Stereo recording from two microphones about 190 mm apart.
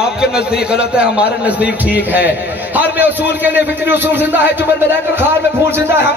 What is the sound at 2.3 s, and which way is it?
Speech, 65° left (ahead or behind).